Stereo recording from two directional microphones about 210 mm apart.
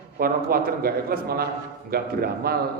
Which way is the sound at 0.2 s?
45° right (ahead or behind).